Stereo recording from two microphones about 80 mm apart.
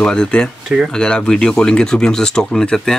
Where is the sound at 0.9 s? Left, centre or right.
Centre.